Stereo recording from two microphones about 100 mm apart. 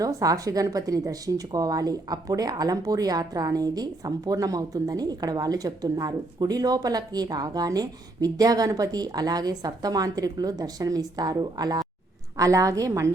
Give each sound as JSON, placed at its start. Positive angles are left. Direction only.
{"t": 0.0, "sound": "speech", "side_deg": -35}